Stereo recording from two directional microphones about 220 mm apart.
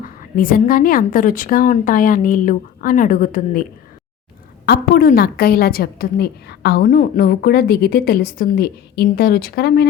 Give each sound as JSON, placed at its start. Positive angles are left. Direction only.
{"t": 0.0, "sound": "a woman's voice", "side_deg": 40}